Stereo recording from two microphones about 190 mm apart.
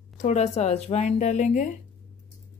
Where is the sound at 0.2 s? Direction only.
35° left (ahead or behind).